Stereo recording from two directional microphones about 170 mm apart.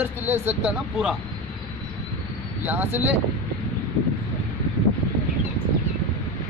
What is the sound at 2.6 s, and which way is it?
Speech, 10° right (ahead or behind).